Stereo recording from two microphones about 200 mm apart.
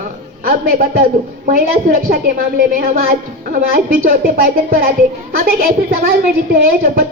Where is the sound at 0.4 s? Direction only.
50° right (ahead or behind).